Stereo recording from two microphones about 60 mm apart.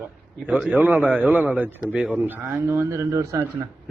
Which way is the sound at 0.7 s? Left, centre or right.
Right.